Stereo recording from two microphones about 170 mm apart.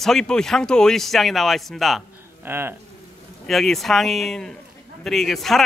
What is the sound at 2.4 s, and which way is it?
Speech, 15° right (ahead or behind).